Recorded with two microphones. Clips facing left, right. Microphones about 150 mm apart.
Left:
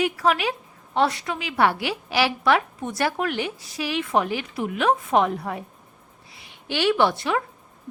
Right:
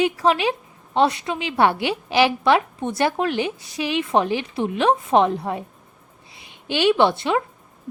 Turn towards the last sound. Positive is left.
turn(degrees=-25)  # may be behind; listen again after turning